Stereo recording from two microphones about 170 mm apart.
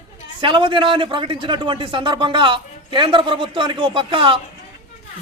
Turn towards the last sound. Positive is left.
turn(degrees=-30)  # may be behind; listen again after turning